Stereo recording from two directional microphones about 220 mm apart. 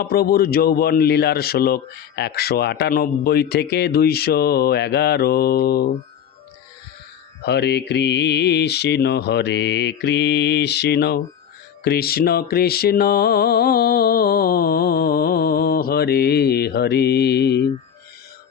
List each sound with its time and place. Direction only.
0.0 s a man's voice: 45° left (ahead or behind)
7.4 s a man's voice: 50° left (ahead or behind)